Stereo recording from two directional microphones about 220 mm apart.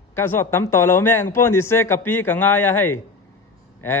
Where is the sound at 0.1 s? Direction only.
10° left (ahead or behind).